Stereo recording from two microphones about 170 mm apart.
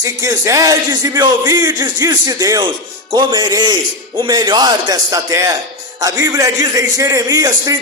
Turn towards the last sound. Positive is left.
turn(degrees=-20)  # may be behind; listen again after turning